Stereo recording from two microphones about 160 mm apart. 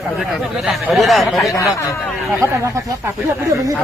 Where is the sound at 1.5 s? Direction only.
20° left (ahead or behind).